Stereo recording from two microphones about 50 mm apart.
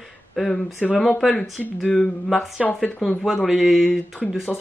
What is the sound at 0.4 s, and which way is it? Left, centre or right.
Speech, centre.